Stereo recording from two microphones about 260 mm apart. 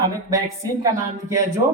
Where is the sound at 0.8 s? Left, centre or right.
Centre.